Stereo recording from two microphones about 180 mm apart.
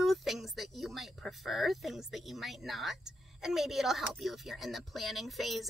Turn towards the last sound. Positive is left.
turn(degrees=0)  # may be behind; listen again after turning